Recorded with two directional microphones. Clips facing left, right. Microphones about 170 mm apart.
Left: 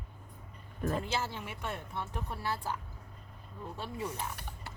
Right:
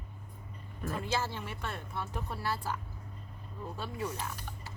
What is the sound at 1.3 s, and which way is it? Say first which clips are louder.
A woman's voice: even; 15° left (ahead or behind).